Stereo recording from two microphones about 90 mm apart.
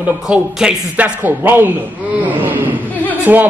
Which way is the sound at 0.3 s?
15° right (ahead or behind).